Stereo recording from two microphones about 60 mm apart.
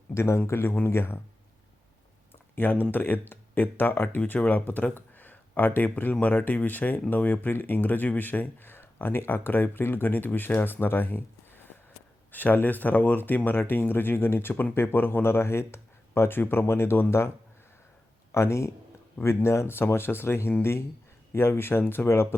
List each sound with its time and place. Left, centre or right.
0.1 s speech: left
2.3 s a sound: left
2.9 s speech: left
12.3 s speech: left